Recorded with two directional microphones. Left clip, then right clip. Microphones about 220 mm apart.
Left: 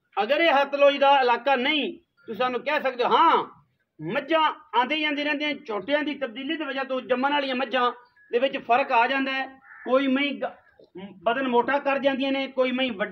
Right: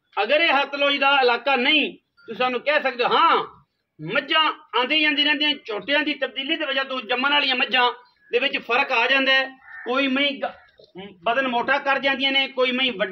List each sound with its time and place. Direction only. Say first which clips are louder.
0.1 s a man's voice: right 2 dB; 40° left (ahead or behind); by 9.5 s 20° left (ahead or behind)
9.8 s a man's voice: right 2 dB; 35° left (ahead or behind)